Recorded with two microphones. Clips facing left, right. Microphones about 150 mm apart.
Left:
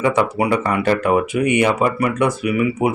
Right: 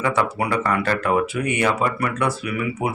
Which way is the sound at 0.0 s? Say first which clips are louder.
Left 4 dB; 15° left (ahead or behind).